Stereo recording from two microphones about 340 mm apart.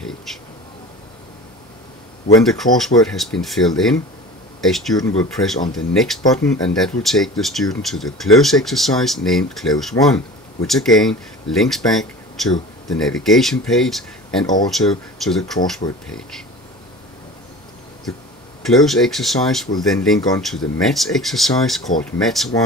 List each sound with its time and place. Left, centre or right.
0.0 s a sound: centre
2.8 s speech: centre
18.7 s speech: centre